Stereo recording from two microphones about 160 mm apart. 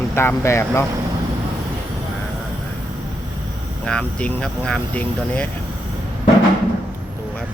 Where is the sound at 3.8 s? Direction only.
5° left (ahead or behind).